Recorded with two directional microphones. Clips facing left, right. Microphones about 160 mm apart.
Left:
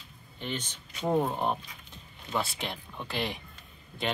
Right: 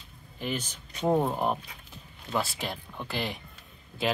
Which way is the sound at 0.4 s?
5° right (ahead or behind).